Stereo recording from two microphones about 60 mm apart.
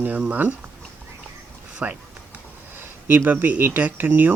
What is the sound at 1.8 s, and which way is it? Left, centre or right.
Speech, right.